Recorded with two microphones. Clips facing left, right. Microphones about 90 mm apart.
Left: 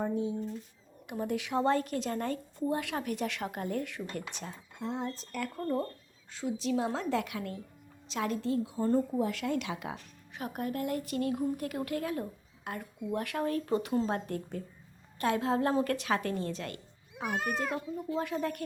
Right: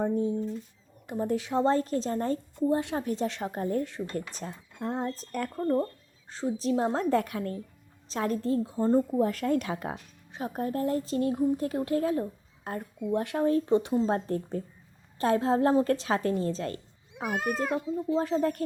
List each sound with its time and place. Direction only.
0.0 s a woman's voice: 40° right (ahead or behind)
4.8 s a woman's voice: 45° right (ahead or behind)
8.8 s a woman's voice: 20° right (ahead or behind)
9.1 s a woman's voice: 40° right (ahead or behind)
10.3 s a woman's voice: 30° right (ahead or behind)